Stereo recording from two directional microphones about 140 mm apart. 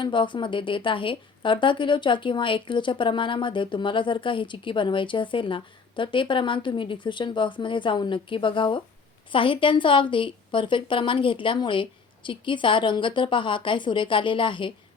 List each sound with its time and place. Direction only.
0.0 s a woman's voice: 35° left (ahead or behind)